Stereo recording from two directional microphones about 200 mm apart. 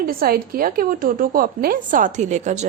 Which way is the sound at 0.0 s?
45° right (ahead or behind).